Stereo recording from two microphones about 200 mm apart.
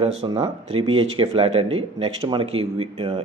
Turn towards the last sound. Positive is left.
turn(degrees=-30)  # may be behind; listen again after turning